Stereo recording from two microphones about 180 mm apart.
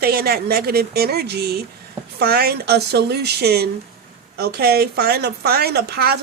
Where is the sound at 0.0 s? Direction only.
60° right (ahead or behind).